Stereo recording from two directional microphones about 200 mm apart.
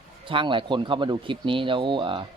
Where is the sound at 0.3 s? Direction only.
25° right (ahead or behind).